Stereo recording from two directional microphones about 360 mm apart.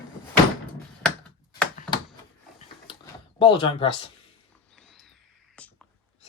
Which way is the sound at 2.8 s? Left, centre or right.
Centre.